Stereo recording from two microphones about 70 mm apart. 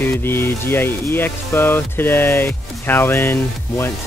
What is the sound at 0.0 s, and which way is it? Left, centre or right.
Speech, left.